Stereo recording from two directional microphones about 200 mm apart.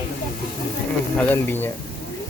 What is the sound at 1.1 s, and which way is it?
Speech, 10° left (ahead or behind).